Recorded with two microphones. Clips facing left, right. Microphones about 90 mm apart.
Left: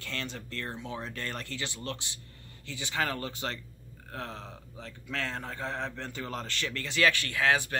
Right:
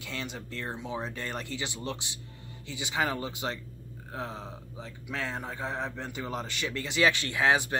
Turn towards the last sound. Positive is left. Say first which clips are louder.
# right 2 dB
turn(degrees=-20)  # may be behind; listen again after turning